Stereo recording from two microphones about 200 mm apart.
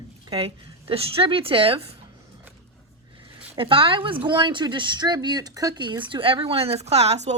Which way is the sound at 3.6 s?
25° right (ahead or behind).